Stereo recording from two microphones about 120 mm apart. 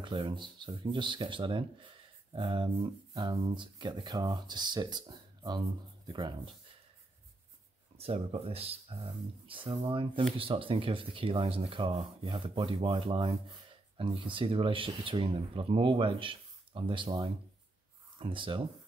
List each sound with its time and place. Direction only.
0.0 s speech: 45° right (ahead or behind)
8.0 s speech: 55° right (ahead or behind)